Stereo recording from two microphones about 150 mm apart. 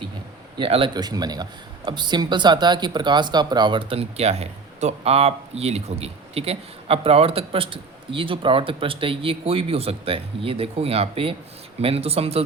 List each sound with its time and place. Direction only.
0.6 s speech: 35° right (ahead or behind)